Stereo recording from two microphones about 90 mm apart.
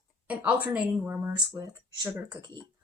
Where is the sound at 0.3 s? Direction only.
15° right (ahead or behind).